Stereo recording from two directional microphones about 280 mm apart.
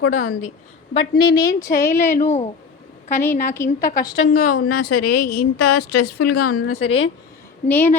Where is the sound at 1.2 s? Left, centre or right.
Centre.